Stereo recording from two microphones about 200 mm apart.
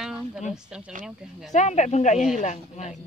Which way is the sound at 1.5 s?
35° left (ahead or behind).